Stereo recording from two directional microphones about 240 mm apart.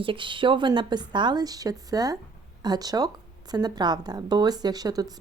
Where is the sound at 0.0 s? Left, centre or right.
Right.